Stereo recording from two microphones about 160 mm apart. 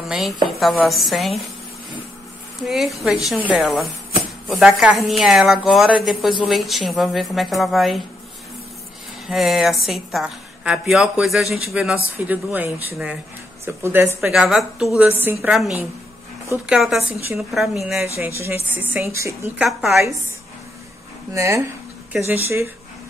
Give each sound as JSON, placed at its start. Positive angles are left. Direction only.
{"t": 0.0, "sound": "a woman's voice", "side_deg": 0}
{"t": 2.6, "sound": "a woman's voice", "side_deg": 0}
{"t": 9.3, "sound": "a woman's voice", "side_deg": 0}
{"t": 14.2, "sound": "a woman's voice", "side_deg": 0}
{"t": 18.1, "sound": "a woman's voice", "side_deg": -15}
{"t": 19.6, "sound": "a woman's voice", "side_deg": 0}
{"t": 21.3, "sound": "a woman's voice", "side_deg": -20}